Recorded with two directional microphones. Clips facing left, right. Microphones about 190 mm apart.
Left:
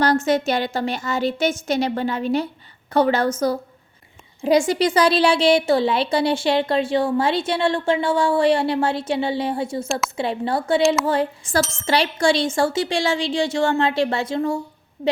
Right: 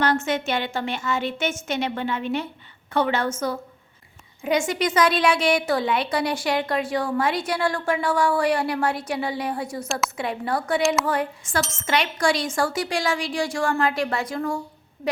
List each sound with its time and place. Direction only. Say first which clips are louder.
0.0 s a woman's voice: left 5 dB; 35° left (ahead or behind)